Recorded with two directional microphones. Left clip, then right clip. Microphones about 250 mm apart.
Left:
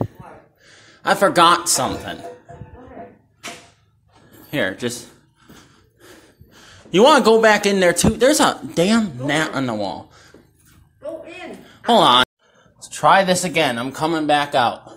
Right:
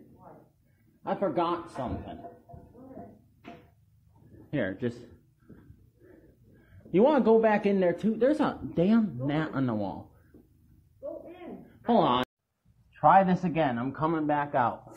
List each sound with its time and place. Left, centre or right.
1.0 s a man's voice: left
4.5 s speech: centre
6.9 s speech: left
11.9 s speech: centre